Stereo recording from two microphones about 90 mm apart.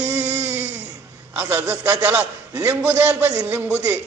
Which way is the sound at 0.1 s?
15° right (ahead or behind).